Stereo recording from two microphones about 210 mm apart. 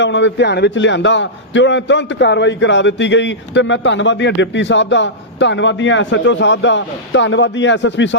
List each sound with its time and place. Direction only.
0.0 s a man's voice: 60° left (ahead or behind)